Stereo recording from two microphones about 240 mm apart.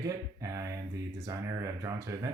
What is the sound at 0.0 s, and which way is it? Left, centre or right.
Speech, centre.